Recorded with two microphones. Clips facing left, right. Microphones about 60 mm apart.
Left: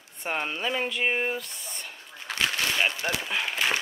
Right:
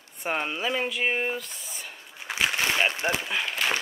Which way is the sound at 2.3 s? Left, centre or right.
Centre.